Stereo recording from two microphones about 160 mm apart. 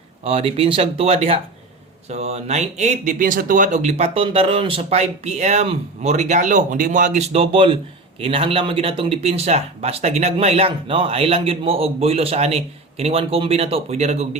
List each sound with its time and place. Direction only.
0.3 s speech: 35° right (ahead or behind)